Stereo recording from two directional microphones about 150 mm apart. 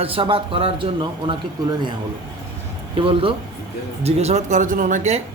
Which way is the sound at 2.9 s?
35° right (ahead or behind).